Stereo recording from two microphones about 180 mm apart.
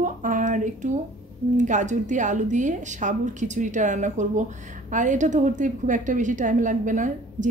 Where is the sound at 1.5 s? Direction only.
40° right (ahead or behind).